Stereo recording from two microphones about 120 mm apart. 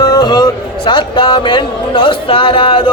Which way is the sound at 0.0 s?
35° left (ahead or behind).